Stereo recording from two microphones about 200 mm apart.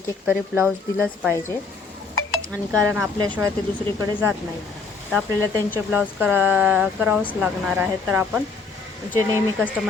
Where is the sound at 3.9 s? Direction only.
25° right (ahead or behind).